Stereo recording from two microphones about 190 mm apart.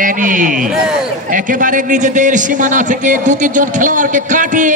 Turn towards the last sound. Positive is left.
turn(degrees=-40)  # may be behind; listen again after turning